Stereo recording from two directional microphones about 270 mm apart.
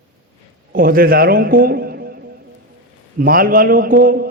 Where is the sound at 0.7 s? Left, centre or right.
Right.